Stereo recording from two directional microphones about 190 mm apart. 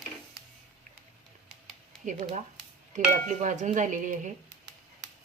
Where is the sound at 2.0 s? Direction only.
40° right (ahead or behind).